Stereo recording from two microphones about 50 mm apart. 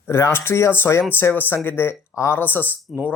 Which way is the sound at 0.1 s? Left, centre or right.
Left.